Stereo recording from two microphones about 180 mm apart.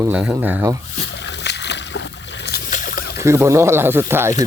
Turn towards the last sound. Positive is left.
turn(degrees=-15)  # may be behind; listen again after turning